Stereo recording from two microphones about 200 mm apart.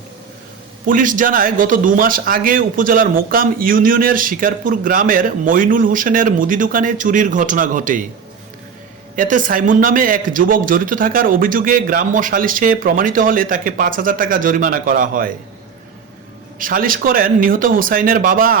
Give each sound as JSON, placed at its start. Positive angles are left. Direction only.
{"t": 0.9, "sound": "a man's voice", "side_deg": -40}
{"t": 9.1, "sound": "a man's voice", "side_deg": -40}
{"t": 16.6, "sound": "a man's voice", "side_deg": -45}